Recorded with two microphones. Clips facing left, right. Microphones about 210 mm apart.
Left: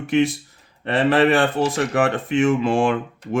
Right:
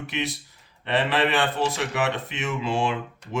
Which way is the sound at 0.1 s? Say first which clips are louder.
Left 14 dB; 50° left (ahead or behind).